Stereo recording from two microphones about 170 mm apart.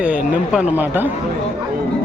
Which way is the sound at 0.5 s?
10° right (ahead or behind).